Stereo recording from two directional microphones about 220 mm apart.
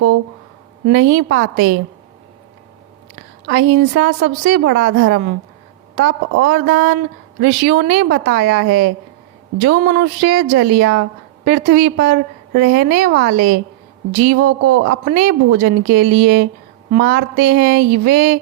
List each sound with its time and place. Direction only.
0.9 s a woman's voice: 50° right (ahead or behind)
3.5 s a woman's voice: 45° right (ahead or behind)